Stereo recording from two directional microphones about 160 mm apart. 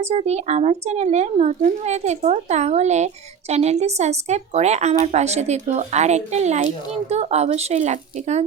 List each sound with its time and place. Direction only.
0.0 s a woman's voice: 40° right (ahead or behind)